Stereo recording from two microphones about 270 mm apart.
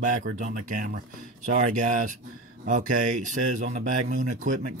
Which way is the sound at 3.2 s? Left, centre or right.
Right.